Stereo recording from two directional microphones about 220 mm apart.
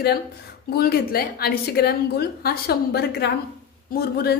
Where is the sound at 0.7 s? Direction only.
45° left (ahead or behind).